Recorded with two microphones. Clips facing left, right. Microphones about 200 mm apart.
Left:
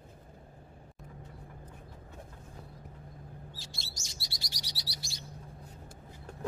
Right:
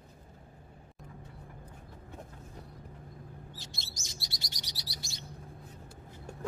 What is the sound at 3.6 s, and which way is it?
Chirp, 20° right (ahead or behind).